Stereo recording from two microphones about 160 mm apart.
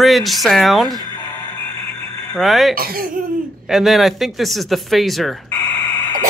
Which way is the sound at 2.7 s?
70° right (ahead or behind).